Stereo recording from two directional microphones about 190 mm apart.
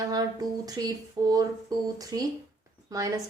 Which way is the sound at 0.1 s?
20° right (ahead or behind).